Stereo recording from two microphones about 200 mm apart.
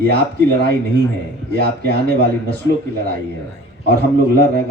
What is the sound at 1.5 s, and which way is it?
Speech, 50° right (ahead or behind).